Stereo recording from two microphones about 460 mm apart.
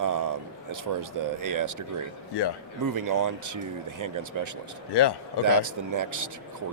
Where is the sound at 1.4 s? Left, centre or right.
Right.